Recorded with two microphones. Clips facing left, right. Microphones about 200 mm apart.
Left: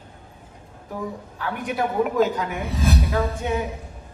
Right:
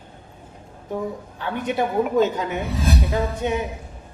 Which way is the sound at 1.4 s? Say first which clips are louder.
Right 2 dB; 25° right (ahead or behind).